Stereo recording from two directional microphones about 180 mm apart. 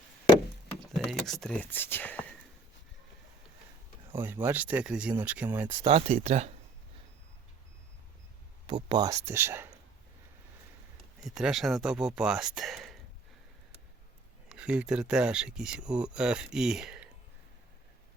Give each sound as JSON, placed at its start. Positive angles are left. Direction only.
{"t": 0.9, "sound": "speech", "side_deg": 0}
{"t": 4.1, "sound": "speech", "side_deg": -10}
{"t": 5.8, "sound": "speech", "side_deg": -35}
{"t": 8.6, "sound": "speech", "side_deg": -25}
{"t": 11.2, "sound": "speech", "side_deg": -5}
{"t": 14.5, "sound": "speech", "side_deg": -5}